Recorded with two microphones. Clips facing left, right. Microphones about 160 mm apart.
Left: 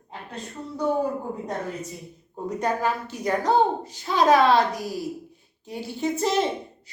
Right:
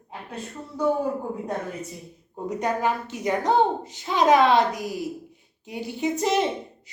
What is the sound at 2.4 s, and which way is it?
A woman's voice, 20° right (ahead or behind).